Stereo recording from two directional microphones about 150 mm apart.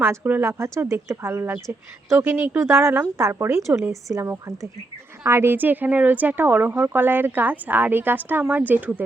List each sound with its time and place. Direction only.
0.0 s speech: 15° right (ahead or behind)